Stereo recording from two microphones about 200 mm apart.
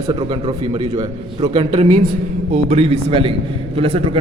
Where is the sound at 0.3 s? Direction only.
30° right (ahead or behind).